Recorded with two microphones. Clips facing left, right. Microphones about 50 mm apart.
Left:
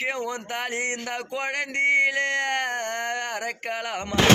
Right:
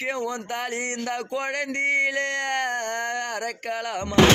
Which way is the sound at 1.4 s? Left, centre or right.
Centre.